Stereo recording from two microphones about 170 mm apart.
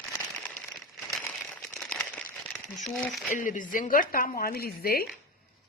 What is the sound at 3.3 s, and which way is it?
Speech, 50° left (ahead or behind).